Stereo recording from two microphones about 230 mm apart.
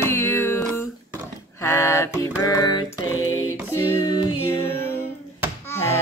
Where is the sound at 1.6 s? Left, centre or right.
Centre.